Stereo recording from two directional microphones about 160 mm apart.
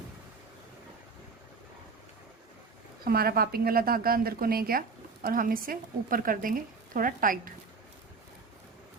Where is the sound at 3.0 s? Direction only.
70° right (ahead or behind).